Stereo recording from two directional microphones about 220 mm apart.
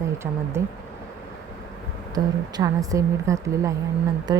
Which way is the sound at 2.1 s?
15° right (ahead or behind).